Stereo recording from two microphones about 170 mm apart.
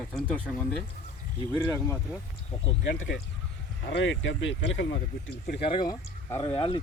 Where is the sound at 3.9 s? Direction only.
90° left.